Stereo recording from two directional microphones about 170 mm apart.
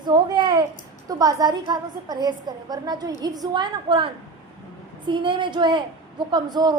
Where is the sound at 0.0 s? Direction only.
25° right (ahead or behind).